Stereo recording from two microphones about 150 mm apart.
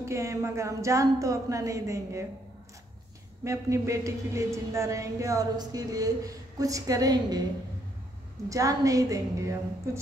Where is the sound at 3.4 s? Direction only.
20° right (ahead or behind).